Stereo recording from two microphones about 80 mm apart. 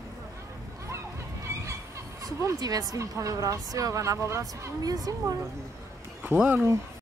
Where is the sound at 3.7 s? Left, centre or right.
Right.